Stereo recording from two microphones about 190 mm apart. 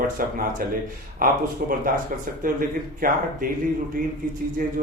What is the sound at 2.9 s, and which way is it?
Speech, 50° right (ahead or behind).